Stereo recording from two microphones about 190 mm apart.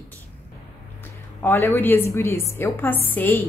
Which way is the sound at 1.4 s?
10° left (ahead or behind).